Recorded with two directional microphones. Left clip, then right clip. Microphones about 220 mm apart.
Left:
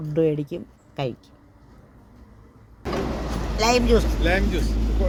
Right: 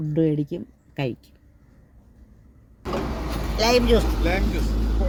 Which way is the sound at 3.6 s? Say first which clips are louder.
Even; 5° left (ahead or behind).